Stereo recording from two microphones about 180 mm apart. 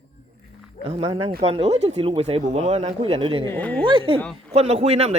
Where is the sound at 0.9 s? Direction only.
35° right (ahead or behind).